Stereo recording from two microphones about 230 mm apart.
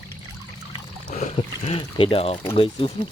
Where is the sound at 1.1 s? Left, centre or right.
Left.